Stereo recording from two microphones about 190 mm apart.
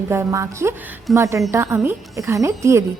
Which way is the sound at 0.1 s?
15° right (ahead or behind).